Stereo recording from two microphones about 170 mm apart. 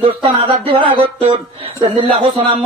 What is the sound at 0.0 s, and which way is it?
A man's voice, 30° right (ahead or behind).